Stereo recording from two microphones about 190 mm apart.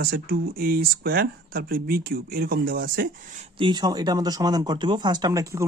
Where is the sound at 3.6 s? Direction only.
20° right (ahead or behind).